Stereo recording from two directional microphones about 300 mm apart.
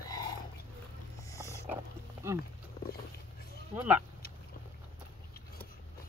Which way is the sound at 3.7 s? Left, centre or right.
Centre.